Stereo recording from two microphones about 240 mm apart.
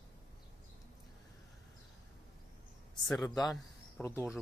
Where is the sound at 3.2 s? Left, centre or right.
Centre.